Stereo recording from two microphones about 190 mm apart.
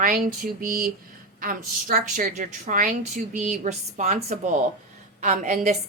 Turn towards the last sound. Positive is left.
turn(degrees=-40)  # may be behind; listen again after turning